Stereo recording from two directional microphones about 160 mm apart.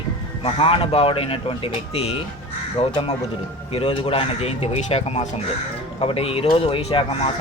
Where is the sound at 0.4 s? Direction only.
35° left (ahead or behind).